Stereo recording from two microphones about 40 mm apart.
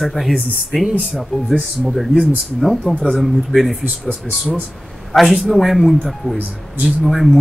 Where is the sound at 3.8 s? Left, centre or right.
Right.